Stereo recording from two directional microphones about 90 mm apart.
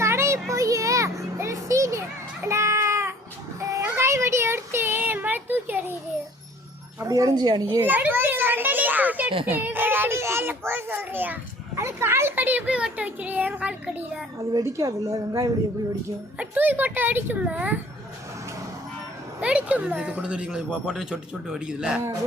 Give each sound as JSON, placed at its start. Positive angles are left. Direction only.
{"t": 0.0, "sound": "a sound", "side_deg": -30}
{"t": 7.0, "sound": "a woman's voice", "side_deg": -40}
{"t": 7.8, "sound": "children playing", "side_deg": -20}
{"t": 9.5, "sound": "a child's voice", "side_deg": -20}
{"t": 11.7, "sound": "speech", "side_deg": -30}
{"t": 14.3, "sound": "a woman's voice", "side_deg": -35}
{"t": 16.4, "sound": "speech", "side_deg": -20}
{"t": 19.4, "sound": "speech", "side_deg": -15}